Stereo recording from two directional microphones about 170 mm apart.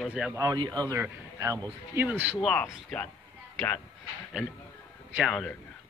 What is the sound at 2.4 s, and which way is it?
Speech, 5° left (ahead or behind).